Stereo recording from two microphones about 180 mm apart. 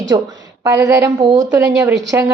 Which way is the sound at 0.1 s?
20° right (ahead or behind).